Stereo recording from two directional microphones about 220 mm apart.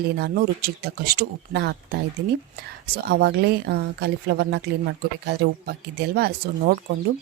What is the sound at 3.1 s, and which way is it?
Speech, 45° right (ahead or behind).